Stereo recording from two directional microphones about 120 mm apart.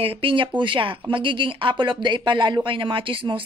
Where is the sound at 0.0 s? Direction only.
45° right (ahead or behind).